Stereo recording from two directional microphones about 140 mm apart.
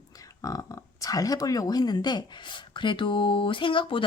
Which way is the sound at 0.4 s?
25° left (ahead or behind).